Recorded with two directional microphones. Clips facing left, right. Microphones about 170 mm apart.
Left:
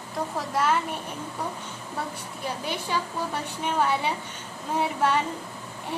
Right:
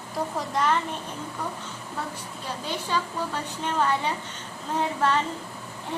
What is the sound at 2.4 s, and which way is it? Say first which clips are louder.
A woman's voice: left 1 dB; 10° left (ahead or behind).